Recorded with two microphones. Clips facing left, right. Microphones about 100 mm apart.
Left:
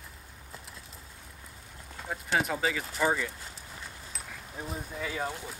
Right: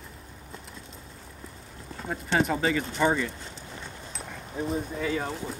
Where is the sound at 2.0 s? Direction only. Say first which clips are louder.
Right 4 dB; centre (ahead or behind).